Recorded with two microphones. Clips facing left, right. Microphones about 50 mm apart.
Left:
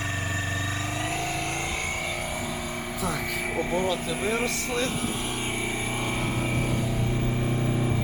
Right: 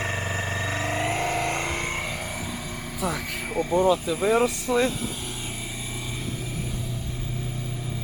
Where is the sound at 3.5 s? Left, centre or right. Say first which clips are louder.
Right 6 dB; left.